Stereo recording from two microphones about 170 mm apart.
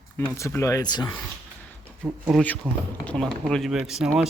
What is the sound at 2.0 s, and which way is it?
Speech, 5° right (ahead or behind).